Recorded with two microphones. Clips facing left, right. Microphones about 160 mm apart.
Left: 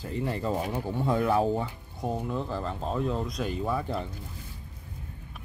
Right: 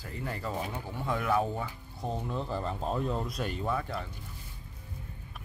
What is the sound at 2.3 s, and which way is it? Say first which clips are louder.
Speech: left 2 dB; centre (ahead or behind).